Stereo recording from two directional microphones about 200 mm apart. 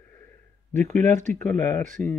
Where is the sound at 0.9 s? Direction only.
10° left (ahead or behind).